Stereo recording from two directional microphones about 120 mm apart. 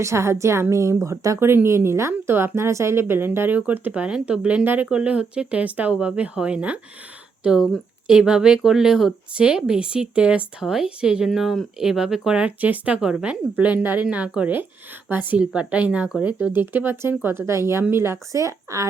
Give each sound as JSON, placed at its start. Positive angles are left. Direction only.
{"t": 0.0, "sound": "a woman's voice", "side_deg": -25}